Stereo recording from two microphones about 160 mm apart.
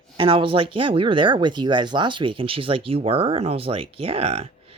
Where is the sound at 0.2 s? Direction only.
35° right (ahead or behind).